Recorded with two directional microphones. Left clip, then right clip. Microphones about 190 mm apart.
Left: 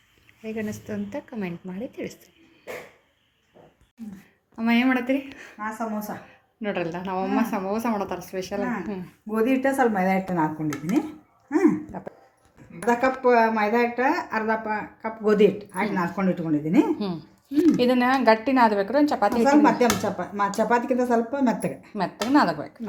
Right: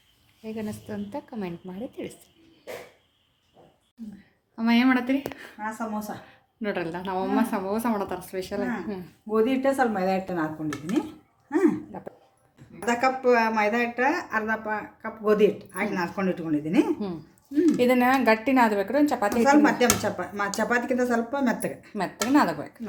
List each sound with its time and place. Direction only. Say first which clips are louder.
0.4 s speech: left 3 dB; 5° left (ahead or behind)
4.5 s speech: even; 5° right (ahead or behind)
9.3 s speech: right 3 dB; 10° left (ahead or behind)
9.6 s speech: left 2 dB; 25° left (ahead or behind)
11.4 s a sound: left 2 dB; 20° left (ahead or behind)
11.9 s dog: left 2 dB; centre (ahead or behind)
12.8 s speech: left 2 dB; 20° left (ahead or behind)
17.0 s speech: left 3 dB; 5° right (ahead or behind)
19.8 s speech: left 1 dB; 20° left (ahead or behind)
21.9 s speech: left 1 dB; centre (ahead or behind)